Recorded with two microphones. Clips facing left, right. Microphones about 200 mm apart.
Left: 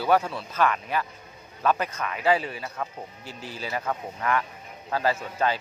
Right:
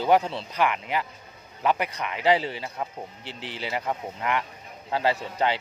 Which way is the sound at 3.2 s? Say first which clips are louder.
Right 1 dB; 85° right.